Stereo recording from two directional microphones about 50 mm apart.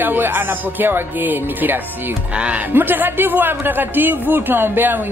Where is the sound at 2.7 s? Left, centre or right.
Right.